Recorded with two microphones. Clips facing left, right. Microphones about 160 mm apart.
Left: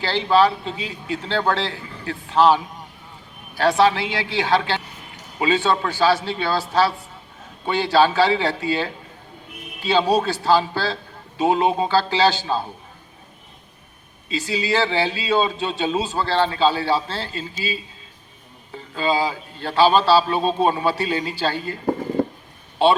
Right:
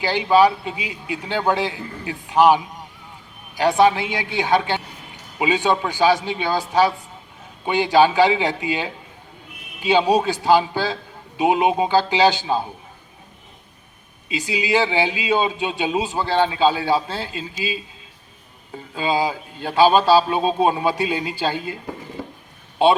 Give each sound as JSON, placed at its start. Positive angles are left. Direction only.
{"t": 0.0, "sound": "a man's voice", "side_deg": -15}
{"t": 14.3, "sound": "a man's voice", "side_deg": -15}
{"t": 18.9, "sound": "a man's voice", "side_deg": -15}
{"t": 22.2, "sound": "a sound", "side_deg": 55}